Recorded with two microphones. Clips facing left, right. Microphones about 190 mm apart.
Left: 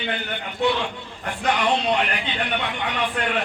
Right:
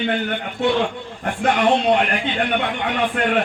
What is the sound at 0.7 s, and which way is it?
A man's voice, 50° right (ahead or behind).